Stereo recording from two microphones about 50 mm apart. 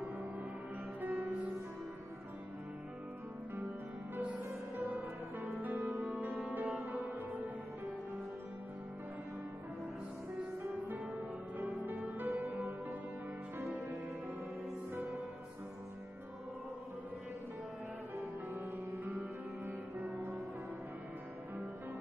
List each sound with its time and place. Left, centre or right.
1.0 s music: right
4.2 s music: right
10.9 s music: right
13.7 s music: right
19.0 s music: right